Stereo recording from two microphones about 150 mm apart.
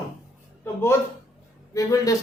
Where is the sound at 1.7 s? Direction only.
20° left (ahead or behind).